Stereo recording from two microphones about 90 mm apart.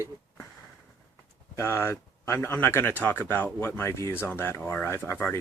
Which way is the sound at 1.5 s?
30° left (ahead or behind).